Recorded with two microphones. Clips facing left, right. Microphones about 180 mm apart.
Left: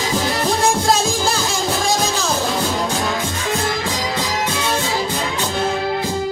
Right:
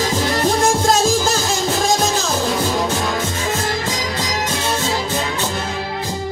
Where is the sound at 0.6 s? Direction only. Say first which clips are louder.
Even; 45° right (ahead or behind).